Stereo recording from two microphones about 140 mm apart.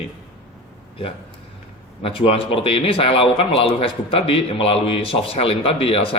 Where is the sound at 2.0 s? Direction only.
40° left (ahead or behind).